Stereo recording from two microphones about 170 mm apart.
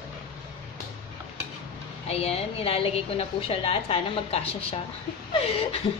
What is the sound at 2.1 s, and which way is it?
A woman's voice, 35° left (ahead or behind).